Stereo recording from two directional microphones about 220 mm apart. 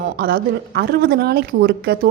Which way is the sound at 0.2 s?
45° right (ahead or behind).